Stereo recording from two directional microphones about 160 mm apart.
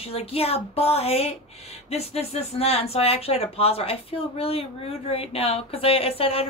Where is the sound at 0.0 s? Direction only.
40° left (ahead or behind).